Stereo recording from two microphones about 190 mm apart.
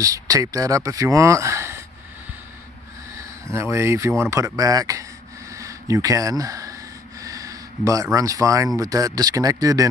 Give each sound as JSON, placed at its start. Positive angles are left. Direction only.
{"t": 0.0, "sound": "speech", "side_deg": -20}
{"t": 3.4, "sound": "speech", "side_deg": -15}
{"t": 5.5, "sound": "a sound", "side_deg": -15}
{"t": 8.7, "sound": "speech", "side_deg": -20}